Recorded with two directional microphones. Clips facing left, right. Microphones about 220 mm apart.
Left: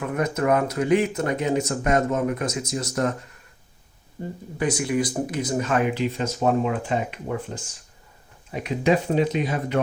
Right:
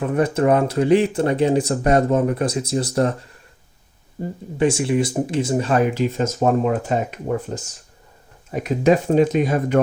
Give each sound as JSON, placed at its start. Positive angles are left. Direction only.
{"t": 0.0, "sound": "speech", "side_deg": -30}
{"t": 4.5, "sound": "speech", "side_deg": -25}